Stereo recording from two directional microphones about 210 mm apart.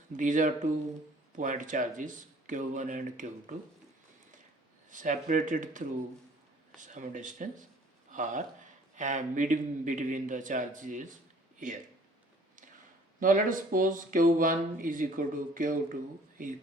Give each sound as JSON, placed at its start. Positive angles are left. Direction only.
{"t": 0.2, "sound": "speech", "side_deg": -35}
{"t": 4.9, "sound": "speech", "side_deg": -35}
{"t": 13.1, "sound": "speech", "side_deg": -40}